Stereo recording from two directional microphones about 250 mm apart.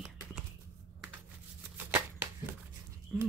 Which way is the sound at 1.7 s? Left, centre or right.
Centre.